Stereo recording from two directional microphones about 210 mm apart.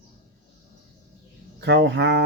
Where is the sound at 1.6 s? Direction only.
55° right (ahead or behind).